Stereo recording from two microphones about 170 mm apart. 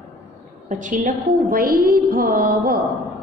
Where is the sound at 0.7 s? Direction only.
45° right (ahead or behind).